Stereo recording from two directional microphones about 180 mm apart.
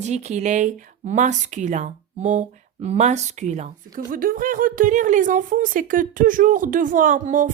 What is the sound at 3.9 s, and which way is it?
A woman's voice, 50° right (ahead or behind).